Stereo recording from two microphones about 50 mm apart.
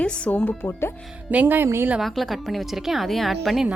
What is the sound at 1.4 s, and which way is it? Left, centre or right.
Speech, right.